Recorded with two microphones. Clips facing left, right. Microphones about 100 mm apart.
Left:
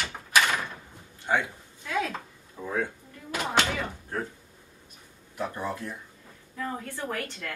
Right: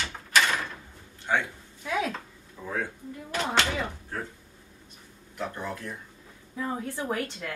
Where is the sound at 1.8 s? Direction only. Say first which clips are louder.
Right 1 dB; 15° right (ahead or behind).